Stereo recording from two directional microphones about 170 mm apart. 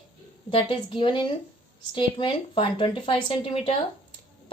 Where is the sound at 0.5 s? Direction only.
30° left (ahead or behind).